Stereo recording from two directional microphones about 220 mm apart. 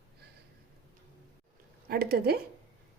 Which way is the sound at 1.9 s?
45° right (ahead or behind).